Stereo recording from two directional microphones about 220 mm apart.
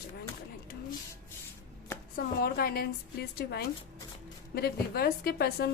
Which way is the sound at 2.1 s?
45° left (ahead or behind).